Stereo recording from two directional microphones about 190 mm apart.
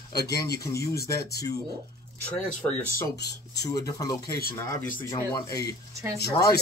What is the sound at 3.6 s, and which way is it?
Speech, 20° left (ahead or behind).